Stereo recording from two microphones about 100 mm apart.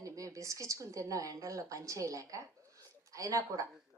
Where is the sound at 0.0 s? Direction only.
35° right (ahead or behind).